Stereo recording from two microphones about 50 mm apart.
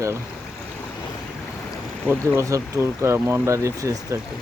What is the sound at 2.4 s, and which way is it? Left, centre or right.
Speech, right.